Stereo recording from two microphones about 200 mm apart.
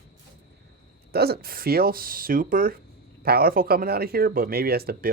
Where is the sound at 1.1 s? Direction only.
50° right (ahead or behind).